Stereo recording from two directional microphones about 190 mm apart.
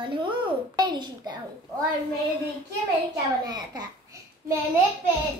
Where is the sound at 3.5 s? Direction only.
20° right (ahead or behind).